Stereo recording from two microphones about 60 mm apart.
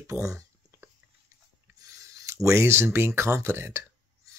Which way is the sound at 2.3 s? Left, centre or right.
Right.